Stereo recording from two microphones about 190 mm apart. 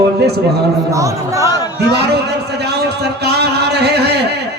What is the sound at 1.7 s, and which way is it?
A man's voice, 60° right (ahead or behind).